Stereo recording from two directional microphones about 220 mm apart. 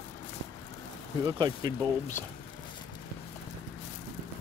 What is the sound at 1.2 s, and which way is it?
Speech, 15° right (ahead or behind).